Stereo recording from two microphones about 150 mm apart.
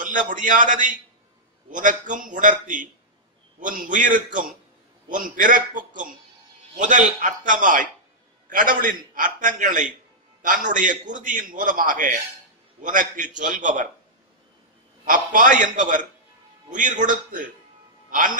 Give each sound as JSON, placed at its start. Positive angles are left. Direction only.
{"t": 0.0, "sound": "a man's voice", "side_deg": -60}
{"t": 15.0, "sound": "a man's voice", "side_deg": -65}